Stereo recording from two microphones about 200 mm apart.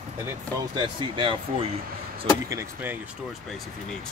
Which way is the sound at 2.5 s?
10° right (ahead or behind).